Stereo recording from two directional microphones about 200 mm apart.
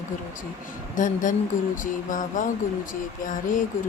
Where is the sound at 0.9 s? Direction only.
40° left (ahead or behind).